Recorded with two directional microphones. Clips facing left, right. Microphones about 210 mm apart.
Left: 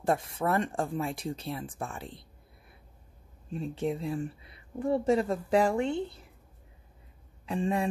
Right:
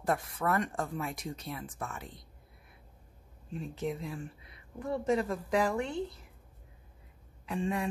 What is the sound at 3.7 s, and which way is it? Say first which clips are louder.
Speech: left 5 dB; 30° left (ahead or behind).